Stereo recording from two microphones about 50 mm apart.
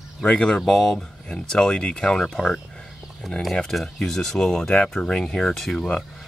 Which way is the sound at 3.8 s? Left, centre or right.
Centre.